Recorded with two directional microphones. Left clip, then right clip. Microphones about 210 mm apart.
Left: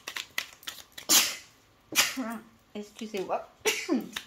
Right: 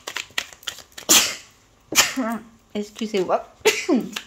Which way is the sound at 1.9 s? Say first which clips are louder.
Right 8 dB; 35° right (ahead or behind).